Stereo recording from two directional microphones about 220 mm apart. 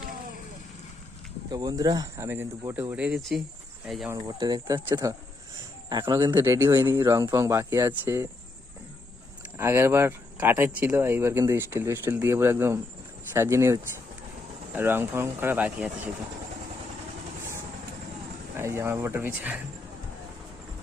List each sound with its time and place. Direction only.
1.5 s speech: 15° right (ahead or behind); by 4.1 s centre (ahead or behind)
4.1 s speech: 15° right (ahead or behind)
9.6 s speech: 10° right (ahead or behind)
14.8 s speech: 10° right (ahead or behind)
18.5 s speech: 10° right (ahead or behind)